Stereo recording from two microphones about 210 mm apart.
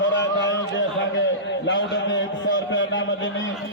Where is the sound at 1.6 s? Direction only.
60° left (ahead or behind).